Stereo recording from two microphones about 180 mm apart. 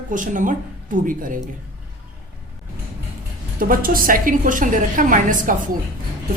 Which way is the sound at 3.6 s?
50° right (ahead or behind).